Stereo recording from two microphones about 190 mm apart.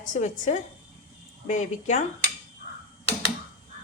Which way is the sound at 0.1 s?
40° left (ahead or behind).